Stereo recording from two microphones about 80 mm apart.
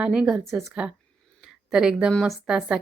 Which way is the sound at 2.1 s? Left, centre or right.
Centre.